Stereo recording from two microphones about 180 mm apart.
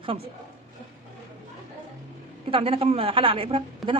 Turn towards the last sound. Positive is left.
turn(degrees=0)  # may be behind; listen again after turning